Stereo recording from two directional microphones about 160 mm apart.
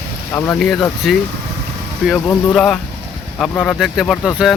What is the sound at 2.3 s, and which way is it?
Speech, 5° left (ahead or behind).